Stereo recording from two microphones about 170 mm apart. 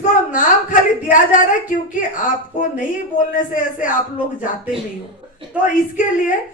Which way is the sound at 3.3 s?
50° left (ahead or behind).